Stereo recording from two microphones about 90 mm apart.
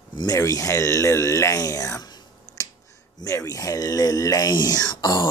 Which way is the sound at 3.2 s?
40° left (ahead or behind).